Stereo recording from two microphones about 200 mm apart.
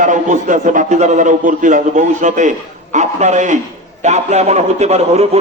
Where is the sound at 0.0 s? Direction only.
40° right (ahead or behind).